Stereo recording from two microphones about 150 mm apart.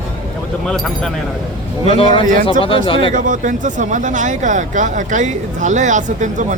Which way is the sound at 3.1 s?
60° right (ahead or behind).